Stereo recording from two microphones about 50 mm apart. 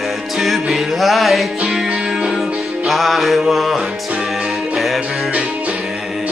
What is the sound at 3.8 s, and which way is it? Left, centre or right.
Music, centre.